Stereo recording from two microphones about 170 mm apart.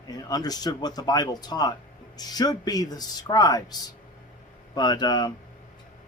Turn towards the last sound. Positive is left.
turn(degrees=25)  # may be behind; listen again after turning